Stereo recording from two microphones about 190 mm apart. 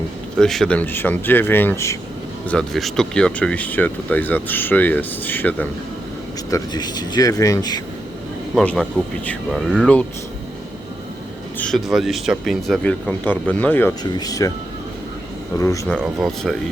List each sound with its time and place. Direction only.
0.3 s speech: centre (ahead or behind)
2.5 s speech: centre (ahead or behind)
6.5 s speech: 20° left (ahead or behind)
8.5 s speech: 5° left (ahead or behind)
11.5 s speech: 5° left (ahead or behind)
14.0 s speech: 20° left (ahead or behind)
15.5 s speech: 15° left (ahead or behind)
16.0 s speech: centre (ahead or behind)